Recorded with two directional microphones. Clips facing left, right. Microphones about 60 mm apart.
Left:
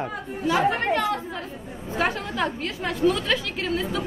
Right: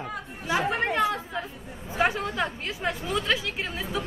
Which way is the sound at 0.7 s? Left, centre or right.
Centre.